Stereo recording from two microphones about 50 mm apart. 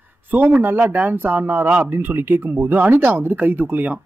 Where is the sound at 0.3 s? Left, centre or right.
Right.